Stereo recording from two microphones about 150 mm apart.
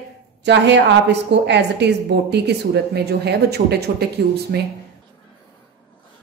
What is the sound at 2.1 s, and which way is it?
Speech, 90° right.